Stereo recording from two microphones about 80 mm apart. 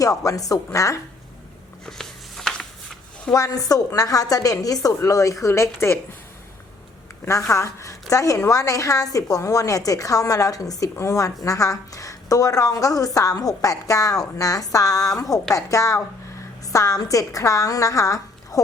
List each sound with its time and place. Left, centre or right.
0.0 s a woman's voice: left
1.9 s a sound: centre
3.3 s a woman's voice: left
7.5 s a woman's voice: left